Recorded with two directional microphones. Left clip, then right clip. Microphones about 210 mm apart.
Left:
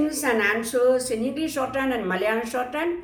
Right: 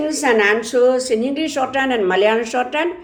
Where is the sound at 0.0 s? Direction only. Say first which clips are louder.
Right 7 dB; 30° right (ahead or behind).